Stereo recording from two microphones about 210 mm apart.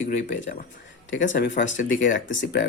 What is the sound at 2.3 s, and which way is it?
Speech, 60° left (ahead or behind).